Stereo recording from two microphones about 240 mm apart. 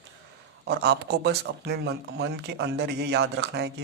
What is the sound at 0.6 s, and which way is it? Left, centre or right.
Speech, right.